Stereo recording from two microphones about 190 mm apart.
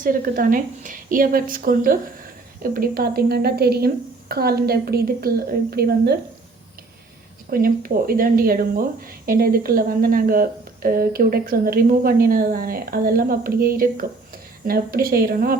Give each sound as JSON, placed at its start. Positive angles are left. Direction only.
{"t": 0.0, "sound": "speech", "side_deg": -45}
{"t": 7.5, "sound": "speech", "side_deg": -50}